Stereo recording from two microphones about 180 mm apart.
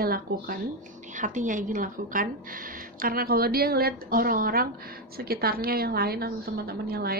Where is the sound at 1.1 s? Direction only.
45° right (ahead or behind).